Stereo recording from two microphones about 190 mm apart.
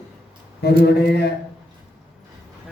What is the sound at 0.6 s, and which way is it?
Speech, 60° left (ahead or behind).